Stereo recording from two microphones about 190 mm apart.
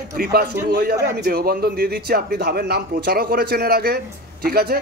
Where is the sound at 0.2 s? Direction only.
55° right (ahead or behind).